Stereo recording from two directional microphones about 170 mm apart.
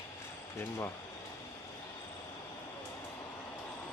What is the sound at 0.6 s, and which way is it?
Speech, 15° left (ahead or behind).